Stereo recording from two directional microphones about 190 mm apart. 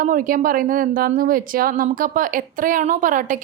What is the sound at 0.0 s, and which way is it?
A woman's voice, 45° right (ahead or behind).